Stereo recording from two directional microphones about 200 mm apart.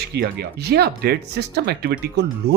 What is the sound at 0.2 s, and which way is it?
Speech, 55° right (ahead or behind).